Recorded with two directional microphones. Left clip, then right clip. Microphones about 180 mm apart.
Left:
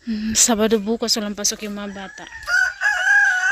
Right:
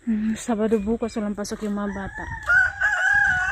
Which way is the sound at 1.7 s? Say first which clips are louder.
Right 2 dB; 20° right (ahead or behind).